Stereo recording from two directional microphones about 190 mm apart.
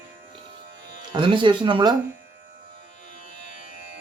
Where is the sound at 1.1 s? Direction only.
25° right (ahead or behind).